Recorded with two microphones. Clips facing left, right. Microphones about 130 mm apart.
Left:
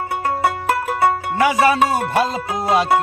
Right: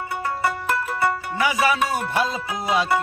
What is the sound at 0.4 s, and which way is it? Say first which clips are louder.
Music: left 4 dB; 70° left (ahead or behind).